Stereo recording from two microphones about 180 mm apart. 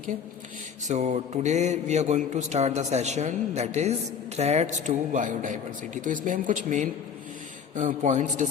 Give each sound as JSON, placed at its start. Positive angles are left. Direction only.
{"t": 0.9, "sound": "a man's voice", "side_deg": -40}